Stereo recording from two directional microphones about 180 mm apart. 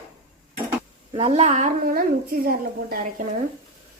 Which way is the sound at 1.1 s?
35° right (ahead or behind).